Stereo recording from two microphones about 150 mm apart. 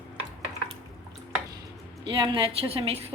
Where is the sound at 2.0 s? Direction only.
35° right (ahead or behind).